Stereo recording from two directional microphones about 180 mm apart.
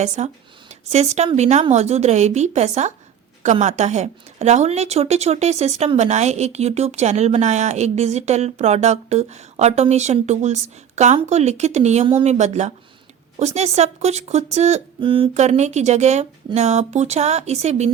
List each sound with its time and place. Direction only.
0.2 s a woman's voice: 40° right (ahead or behind)